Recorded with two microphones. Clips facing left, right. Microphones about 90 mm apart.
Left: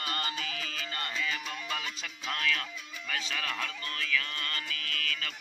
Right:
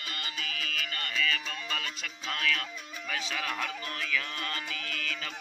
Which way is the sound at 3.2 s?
10° right (ahead or behind).